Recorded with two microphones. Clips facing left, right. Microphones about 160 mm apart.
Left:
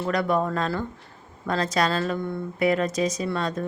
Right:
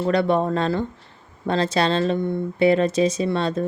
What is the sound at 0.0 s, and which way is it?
Speech, 30° right (ahead or behind).